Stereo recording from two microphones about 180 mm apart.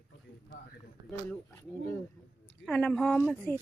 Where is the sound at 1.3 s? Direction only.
10° left (ahead or behind).